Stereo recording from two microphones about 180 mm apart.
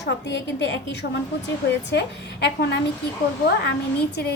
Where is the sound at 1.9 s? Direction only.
70° left (ahead or behind).